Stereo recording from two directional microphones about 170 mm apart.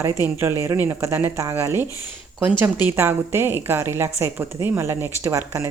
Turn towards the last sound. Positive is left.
turn(degrees=-15)  # may be behind; listen again after turning